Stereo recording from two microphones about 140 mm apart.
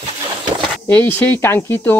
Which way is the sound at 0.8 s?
15° left (ahead or behind).